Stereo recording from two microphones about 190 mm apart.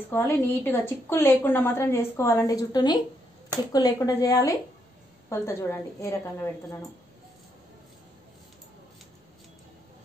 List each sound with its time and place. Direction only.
0.1 s a woman's voice: 10° left (ahead or behind)